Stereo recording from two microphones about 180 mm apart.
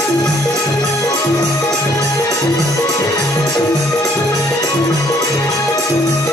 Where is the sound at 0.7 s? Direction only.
20° left (ahead or behind).